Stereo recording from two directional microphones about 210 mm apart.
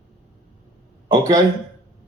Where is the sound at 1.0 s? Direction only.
15° right (ahead or behind).